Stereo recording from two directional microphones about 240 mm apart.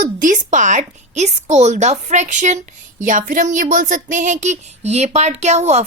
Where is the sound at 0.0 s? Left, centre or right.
Right.